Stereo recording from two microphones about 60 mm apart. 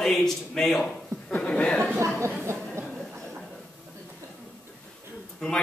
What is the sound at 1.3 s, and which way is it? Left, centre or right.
Speech, centre.